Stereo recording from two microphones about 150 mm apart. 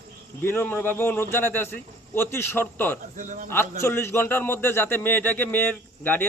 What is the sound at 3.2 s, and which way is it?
Speech, 55° right (ahead or behind).